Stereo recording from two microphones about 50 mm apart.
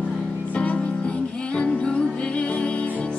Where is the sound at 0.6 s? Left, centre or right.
Left.